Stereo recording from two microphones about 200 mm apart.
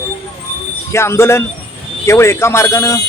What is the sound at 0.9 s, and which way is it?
Speech, 15° left (ahead or behind).